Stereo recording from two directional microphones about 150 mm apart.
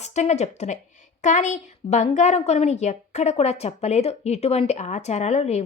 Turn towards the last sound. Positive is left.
turn(degrees=45)  # may be behind; listen again after turning